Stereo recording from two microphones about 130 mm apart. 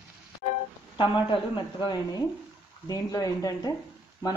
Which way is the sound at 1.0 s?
35° left (ahead or behind).